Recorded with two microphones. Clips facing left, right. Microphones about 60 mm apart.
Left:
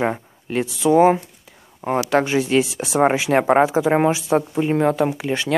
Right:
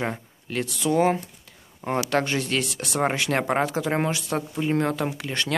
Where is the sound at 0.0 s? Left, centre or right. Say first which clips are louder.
Left 7 dB; centre.